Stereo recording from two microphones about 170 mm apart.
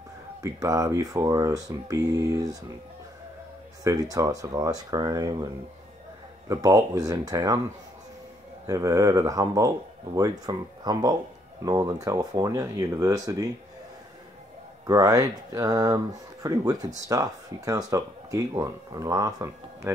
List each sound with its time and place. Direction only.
0.4 s speech: 20° right (ahead or behind)
3.8 s speech: 20° right (ahead or behind)
6.5 s speech: 20° right (ahead or behind)
8.6 s speech: 20° right (ahead or behind)
14.9 s speech: 20° right (ahead or behind)